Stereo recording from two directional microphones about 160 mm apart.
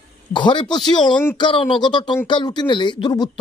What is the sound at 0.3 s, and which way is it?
Speech, 30° left (ahead or behind).